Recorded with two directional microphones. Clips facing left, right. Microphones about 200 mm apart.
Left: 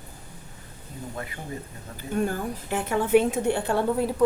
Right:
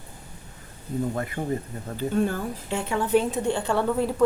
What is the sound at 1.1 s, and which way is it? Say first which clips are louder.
Speech: right 6 dB; 45° right (ahead or behind).